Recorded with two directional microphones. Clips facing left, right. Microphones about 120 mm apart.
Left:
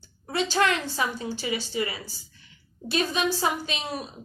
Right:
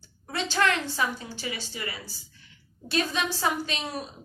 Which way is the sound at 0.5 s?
15° left (ahead or behind).